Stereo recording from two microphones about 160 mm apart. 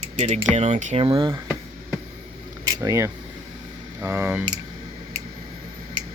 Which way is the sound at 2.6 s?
20° right (ahead or behind).